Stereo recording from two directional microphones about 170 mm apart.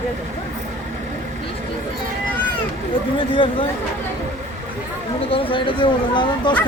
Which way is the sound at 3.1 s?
30° left (ahead or behind).